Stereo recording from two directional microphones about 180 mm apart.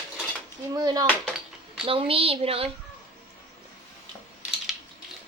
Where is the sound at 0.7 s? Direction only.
20° right (ahead or behind).